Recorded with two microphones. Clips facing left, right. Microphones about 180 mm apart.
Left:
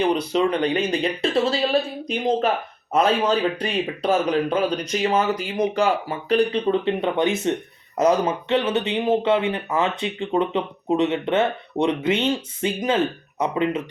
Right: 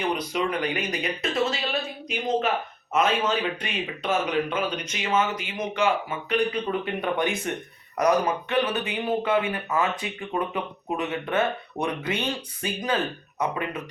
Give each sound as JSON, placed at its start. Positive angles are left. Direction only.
{"t": 0.0, "sound": "a man's voice", "side_deg": 30}